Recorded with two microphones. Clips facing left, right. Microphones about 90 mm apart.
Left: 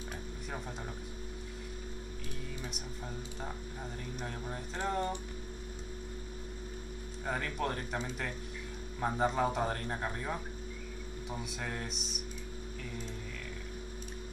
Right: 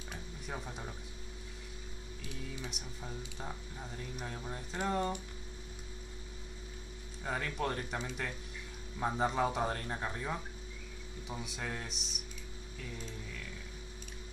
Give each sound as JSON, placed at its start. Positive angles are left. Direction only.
{"t": 0.5, "sound": "speech", "side_deg": 5}
{"t": 4.7, "sound": "speech", "side_deg": 0}
{"t": 7.2, "sound": "speech", "side_deg": 0}
{"t": 9.0, "sound": "speech", "side_deg": 0}